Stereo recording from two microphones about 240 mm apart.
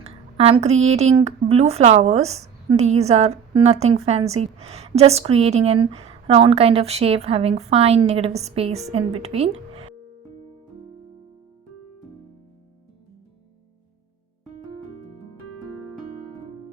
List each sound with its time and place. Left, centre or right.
0.0 s speech: right